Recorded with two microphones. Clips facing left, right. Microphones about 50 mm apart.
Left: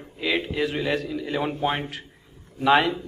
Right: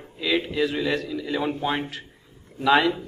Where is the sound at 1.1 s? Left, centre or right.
Left.